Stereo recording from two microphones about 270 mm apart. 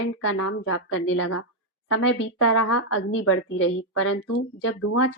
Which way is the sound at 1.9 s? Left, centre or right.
Left.